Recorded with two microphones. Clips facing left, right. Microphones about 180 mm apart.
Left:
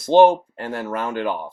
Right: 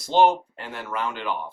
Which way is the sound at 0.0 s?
50° left (ahead or behind).